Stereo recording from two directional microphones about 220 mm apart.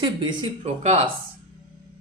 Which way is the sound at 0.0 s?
20° right (ahead or behind).